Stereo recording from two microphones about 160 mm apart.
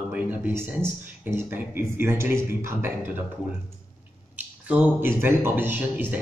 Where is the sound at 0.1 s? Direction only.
10° right (ahead or behind).